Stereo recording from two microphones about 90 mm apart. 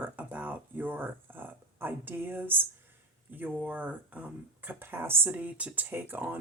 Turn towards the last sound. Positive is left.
turn(degrees=-20)  # may be behind; listen again after turning